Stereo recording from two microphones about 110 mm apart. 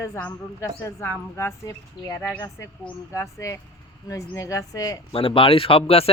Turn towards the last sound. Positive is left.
turn(degrees=65)  # may be behind; listen again after turning